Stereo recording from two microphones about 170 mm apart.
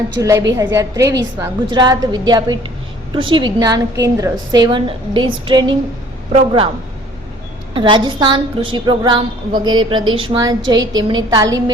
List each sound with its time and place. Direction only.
0.2 s a woman's voice: 15° right (ahead or behind); by 6.7 s 35° right (ahead or behind)
7.7 s a woman's voice: 30° right (ahead or behind)